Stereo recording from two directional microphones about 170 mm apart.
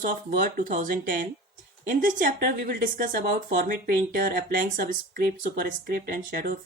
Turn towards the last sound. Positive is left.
turn(degrees=-55)  # may be behind; listen again after turning